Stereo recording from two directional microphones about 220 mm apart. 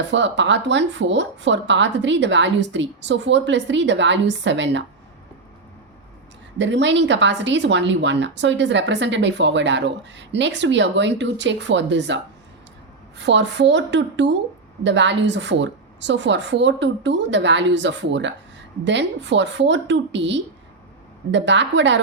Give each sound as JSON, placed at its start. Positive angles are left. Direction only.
{"t": 0.1, "sound": "speech", "side_deg": -55}
{"t": 6.6, "sound": "a woman's voice", "side_deg": -55}